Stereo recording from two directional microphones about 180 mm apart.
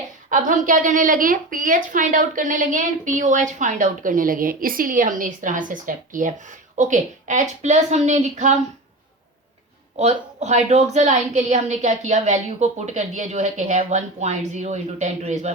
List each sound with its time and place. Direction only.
0.3 s a woman's voice: 45° right (ahead or behind)
10.0 s a woman's voice: 40° right (ahead or behind)